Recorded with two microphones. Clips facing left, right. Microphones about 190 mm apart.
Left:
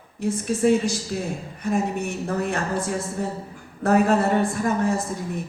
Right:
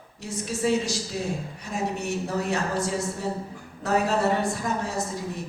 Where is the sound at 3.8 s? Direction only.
55° left (ahead or behind).